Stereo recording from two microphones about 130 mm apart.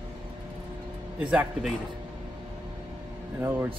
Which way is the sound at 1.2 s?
10° right (ahead or behind).